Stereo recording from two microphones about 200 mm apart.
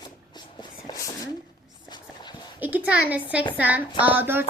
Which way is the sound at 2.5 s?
10° right (ahead or behind).